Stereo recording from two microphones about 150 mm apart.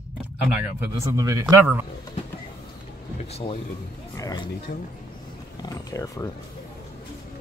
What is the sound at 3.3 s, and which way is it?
Speech, 35° left (ahead or behind).